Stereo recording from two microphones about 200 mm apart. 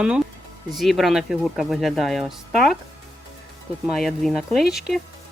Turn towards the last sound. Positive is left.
turn(degrees=0)  # may be behind; listen again after turning